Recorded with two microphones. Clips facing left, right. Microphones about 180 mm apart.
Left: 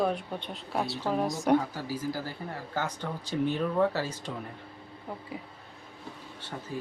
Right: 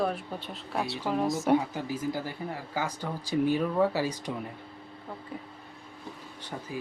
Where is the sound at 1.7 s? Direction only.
20° right (ahead or behind).